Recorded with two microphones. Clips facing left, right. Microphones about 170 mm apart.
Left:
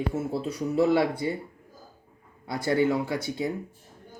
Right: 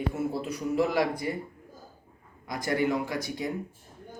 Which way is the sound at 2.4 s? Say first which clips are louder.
Left 4 dB; 30° left (ahead or behind).